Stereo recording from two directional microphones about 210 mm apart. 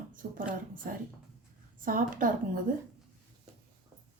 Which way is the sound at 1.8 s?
40° right (ahead or behind).